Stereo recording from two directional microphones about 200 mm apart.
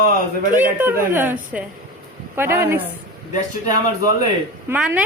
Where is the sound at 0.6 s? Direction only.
10° right (ahead or behind).